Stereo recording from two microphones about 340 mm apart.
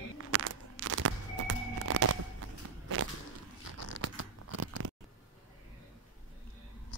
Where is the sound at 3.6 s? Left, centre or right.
Right.